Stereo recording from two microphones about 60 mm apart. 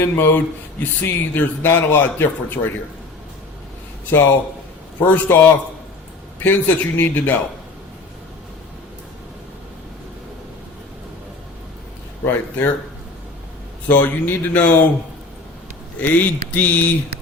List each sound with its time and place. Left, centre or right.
0.0 s speech: left
5.0 s speech: left
12.2 s speech: left
13.8 s speech: left
16.0 s speech: left